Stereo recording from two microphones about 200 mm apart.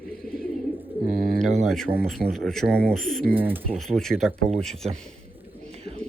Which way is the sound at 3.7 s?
Centre (ahead or behind).